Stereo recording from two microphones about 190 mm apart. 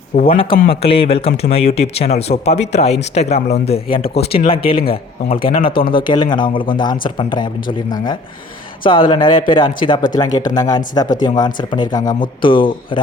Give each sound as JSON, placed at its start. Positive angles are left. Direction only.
{"t": 0.2, "sound": "speech", "side_deg": 30}